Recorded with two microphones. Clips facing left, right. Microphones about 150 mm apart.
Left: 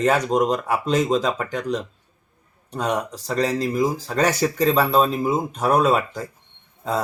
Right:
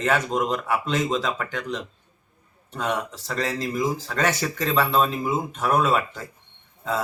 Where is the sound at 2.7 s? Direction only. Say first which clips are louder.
Left 3 dB; 35° left (ahead or behind).